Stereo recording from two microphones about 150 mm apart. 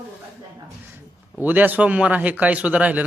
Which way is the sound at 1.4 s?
10° right (ahead or behind).